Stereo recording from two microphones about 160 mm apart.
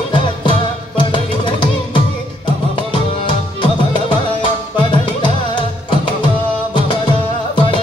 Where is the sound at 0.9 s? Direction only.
30° left (ahead or behind).